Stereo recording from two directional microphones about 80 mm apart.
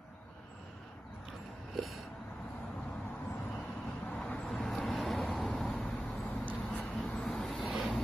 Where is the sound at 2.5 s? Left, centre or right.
Centre.